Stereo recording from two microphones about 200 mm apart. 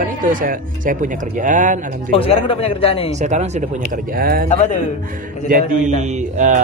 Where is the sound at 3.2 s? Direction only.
35° right (ahead or behind).